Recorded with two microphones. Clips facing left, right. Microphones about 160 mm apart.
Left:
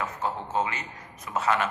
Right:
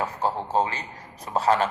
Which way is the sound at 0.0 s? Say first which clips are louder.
Right 4 dB; 35° right (ahead or behind).